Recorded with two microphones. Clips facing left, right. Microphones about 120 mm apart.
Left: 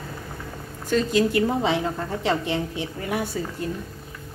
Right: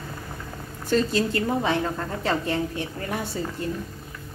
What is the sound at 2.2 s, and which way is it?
Speech, 15° left (ahead or behind).